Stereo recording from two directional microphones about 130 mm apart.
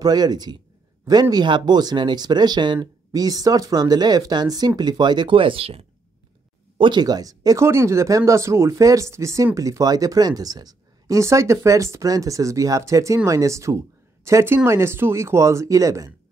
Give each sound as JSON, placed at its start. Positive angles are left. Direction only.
{"t": 0.0, "sound": "speech", "side_deg": -30}
{"t": 6.8, "sound": "speech", "side_deg": -35}